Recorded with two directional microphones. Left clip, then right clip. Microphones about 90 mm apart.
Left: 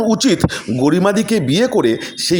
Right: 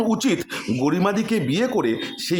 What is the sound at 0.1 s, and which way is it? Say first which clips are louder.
Speech: left 7 dB; 40° left (ahead or behind).